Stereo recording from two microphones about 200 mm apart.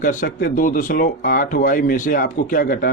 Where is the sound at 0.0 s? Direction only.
40° left (ahead or behind).